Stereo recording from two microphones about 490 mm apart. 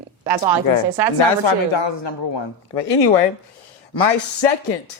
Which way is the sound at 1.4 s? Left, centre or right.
Left.